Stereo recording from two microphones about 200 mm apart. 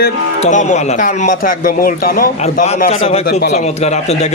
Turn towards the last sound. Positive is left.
turn(degrees=55)  # may be behind; listen again after turning